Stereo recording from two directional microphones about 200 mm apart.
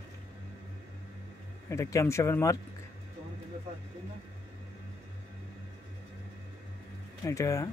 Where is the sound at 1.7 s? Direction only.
15° left (ahead or behind).